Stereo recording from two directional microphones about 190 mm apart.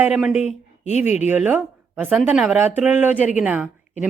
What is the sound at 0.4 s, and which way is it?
Speech, 35° left (ahead or behind).